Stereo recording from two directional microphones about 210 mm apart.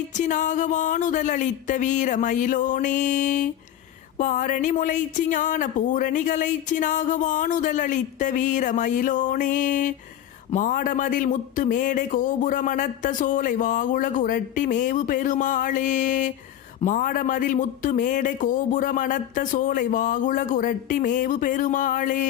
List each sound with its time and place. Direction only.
0.2 s speech: 35° left (ahead or behind)